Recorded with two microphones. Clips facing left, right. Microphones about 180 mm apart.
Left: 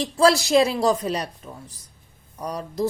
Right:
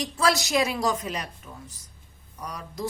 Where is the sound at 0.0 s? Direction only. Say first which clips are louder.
Left 6 dB; 30° left (ahead or behind).